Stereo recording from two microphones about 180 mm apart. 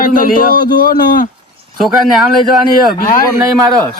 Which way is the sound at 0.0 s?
50° left (ahead or behind).